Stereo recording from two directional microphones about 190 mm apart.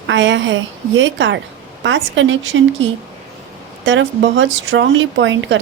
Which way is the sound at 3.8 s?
70° right (ahead or behind).